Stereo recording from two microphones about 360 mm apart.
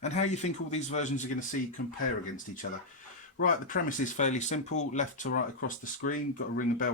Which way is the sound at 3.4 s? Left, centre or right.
Left.